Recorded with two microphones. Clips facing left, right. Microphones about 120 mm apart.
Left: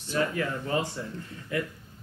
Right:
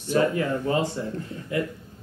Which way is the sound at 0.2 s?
25° right (ahead or behind).